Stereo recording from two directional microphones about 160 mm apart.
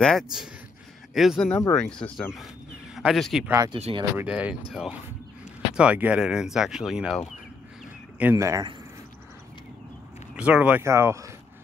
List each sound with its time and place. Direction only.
0.0 s speech: centre (ahead or behind)
1.5 s speech: 20° left (ahead or behind)
1.8 s speech: 5° left (ahead or behind)
3.4 s speech: 20° right (ahead or behind)
3.7 s speech: 35° right (ahead or behind)
4.2 s speech: 10° right (ahead or behind)
8.2 s speech: 15° right (ahead or behind)
10.3 s speech: 5° right (ahead or behind)